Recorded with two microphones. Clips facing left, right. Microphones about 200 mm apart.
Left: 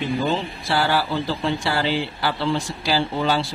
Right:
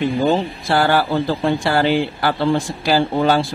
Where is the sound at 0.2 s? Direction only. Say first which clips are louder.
Right 6 dB; 50° right (ahead or behind).